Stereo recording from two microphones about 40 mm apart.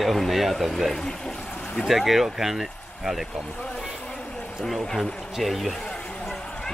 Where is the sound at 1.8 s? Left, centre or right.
Centre.